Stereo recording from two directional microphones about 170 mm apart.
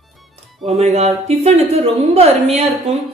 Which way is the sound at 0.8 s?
40° right (ahead or behind).